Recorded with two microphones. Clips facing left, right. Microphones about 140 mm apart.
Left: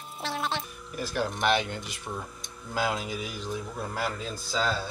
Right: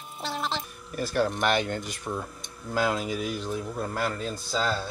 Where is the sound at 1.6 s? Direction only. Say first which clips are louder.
Right 4 dB; 45° right (ahead or behind).